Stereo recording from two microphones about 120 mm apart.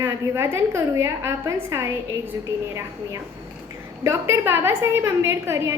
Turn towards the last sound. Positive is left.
turn(degrees=-20)  # may be behind; listen again after turning